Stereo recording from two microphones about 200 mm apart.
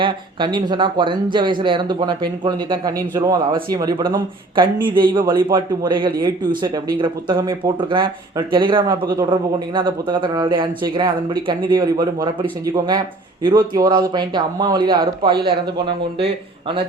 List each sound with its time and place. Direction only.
0.0 s speech: 25° right (ahead or behind)